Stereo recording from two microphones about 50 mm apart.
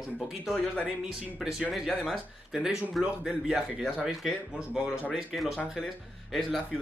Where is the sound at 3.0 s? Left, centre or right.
Centre.